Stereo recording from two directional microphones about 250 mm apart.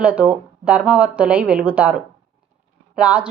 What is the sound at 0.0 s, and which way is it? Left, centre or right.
A woman's voice, centre.